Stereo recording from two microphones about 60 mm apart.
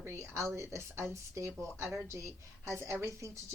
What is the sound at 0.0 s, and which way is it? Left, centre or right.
A woman's voice, right.